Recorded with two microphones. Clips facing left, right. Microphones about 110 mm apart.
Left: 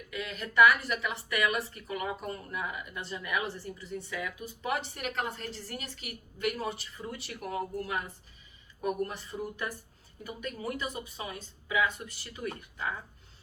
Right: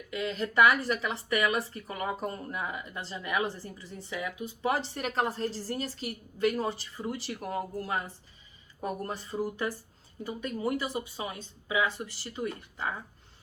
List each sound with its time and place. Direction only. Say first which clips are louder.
0.1 s speech: right 6 dB; 30° right (ahead or behind)